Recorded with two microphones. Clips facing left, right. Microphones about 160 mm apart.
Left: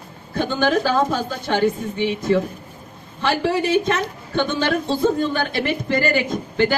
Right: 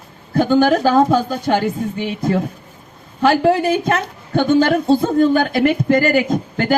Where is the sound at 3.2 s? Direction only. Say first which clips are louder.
Right 6 dB; 45° right (ahead or behind).